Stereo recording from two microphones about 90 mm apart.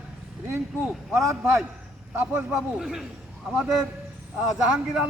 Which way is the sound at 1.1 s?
35° right (ahead or behind).